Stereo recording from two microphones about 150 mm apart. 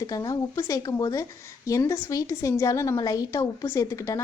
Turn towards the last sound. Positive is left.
turn(degrees=20)  # may be behind; listen again after turning